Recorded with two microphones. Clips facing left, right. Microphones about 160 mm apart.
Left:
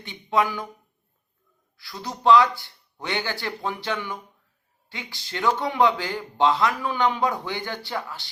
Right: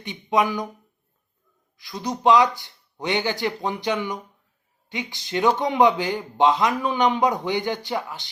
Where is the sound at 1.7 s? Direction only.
20° right (ahead or behind).